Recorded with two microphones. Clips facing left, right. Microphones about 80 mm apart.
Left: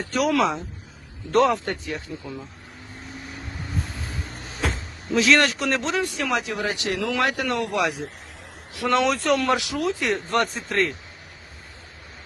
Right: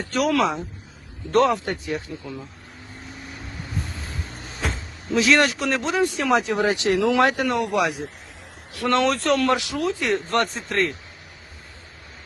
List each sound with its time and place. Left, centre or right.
0.0 s speech: centre
1.6 s speech: centre
3.8 s vehicle: centre
4.4 s music: centre
5.1 s speech: centre
6.0 s speech: right
8.9 s speech: centre